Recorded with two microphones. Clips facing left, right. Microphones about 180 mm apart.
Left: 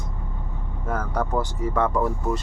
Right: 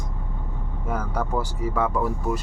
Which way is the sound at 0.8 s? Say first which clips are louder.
Left 1 dB; 10° right (ahead or behind).